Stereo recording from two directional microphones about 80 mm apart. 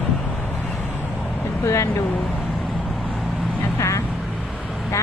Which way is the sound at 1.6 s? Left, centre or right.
Left.